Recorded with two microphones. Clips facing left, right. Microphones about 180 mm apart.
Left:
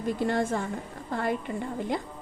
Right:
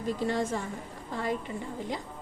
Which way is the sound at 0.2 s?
55° left (ahead or behind).